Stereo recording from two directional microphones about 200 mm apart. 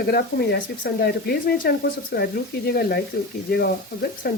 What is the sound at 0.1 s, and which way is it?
Speech, 50° left (ahead or behind).